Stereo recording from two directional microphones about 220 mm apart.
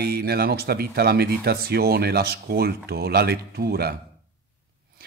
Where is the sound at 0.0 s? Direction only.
45° right (ahead or behind).